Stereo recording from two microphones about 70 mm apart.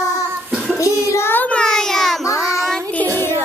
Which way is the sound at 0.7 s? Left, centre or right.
Left.